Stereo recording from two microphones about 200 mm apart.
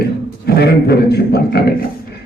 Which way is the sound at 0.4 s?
55° left (ahead or behind).